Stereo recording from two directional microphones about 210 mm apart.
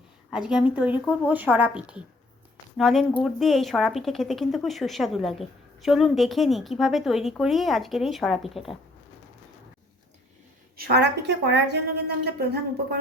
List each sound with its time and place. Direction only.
0.3 s a woman's voice: 5° right (ahead or behind)
10.8 s a woman's voice: 50° right (ahead or behind)